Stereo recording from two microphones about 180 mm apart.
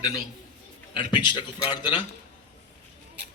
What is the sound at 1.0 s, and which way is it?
A man's voice, 25° left (ahead or behind).